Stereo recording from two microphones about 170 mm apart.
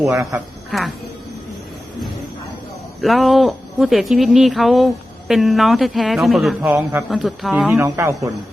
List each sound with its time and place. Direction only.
0.0 s speech: 15° right (ahead or behind)
0.7 s speech: centre (ahead or behind)
3.0 s speech: centre (ahead or behind)
7.1 s speech: centre (ahead or behind)
7.8 s speech: 15° right (ahead or behind)